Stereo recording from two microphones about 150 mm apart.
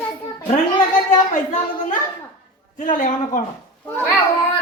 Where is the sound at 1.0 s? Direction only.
55° left (ahead or behind).